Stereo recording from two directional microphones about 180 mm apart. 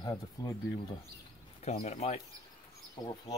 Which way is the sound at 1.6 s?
40° left (ahead or behind).